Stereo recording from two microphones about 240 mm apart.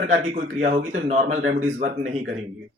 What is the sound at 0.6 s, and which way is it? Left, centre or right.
Speech, right.